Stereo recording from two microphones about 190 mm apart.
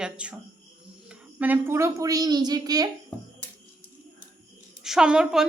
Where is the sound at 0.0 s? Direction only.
5° right (ahead or behind).